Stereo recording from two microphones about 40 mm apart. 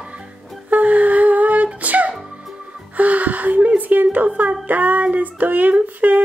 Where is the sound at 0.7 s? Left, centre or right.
Right.